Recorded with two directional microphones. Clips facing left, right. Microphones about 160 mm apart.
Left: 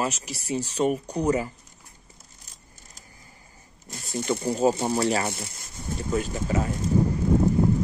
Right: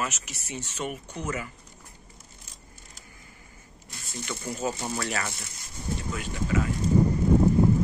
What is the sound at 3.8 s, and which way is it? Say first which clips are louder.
Speech: left 10 dB; 40° left (ahead or behind).